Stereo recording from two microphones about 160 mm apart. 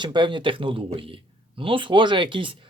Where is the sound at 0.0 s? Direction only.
30° right (ahead or behind).